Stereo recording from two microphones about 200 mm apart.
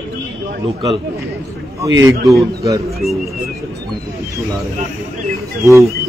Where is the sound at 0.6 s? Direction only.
25° right (ahead or behind).